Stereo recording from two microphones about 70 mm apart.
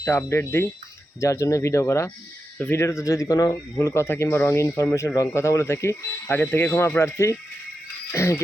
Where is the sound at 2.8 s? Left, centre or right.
Left.